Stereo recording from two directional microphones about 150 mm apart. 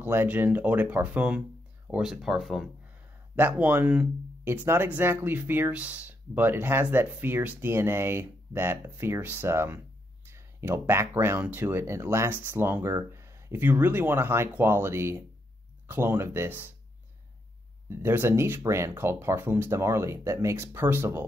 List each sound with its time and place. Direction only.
0.0 s speech: 15° right (ahead or behind)
3.3 s speech: 10° right (ahead or behind)
17.8 s speech: 15° right (ahead or behind)